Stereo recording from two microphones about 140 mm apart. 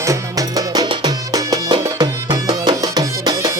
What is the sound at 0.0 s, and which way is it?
Music, 25° right (ahead or behind).